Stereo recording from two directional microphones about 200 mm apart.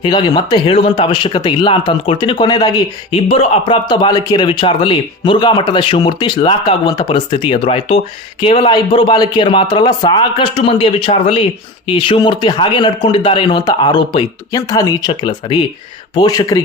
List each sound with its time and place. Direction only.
0.0 s speech: 25° left (ahead or behind)